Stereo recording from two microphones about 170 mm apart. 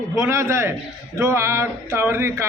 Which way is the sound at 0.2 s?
15° right (ahead or behind).